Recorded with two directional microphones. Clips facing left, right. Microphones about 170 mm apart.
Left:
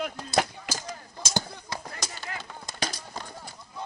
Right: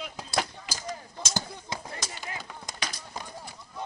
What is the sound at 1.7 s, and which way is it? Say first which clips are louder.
Chop: left 1 dB; 20° right (ahead or behind).